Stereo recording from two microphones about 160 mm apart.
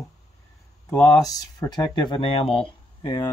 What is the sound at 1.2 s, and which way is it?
Speech, 20° left (ahead or behind).